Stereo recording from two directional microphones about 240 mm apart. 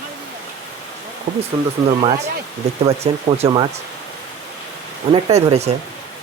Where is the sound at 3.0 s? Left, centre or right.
Right.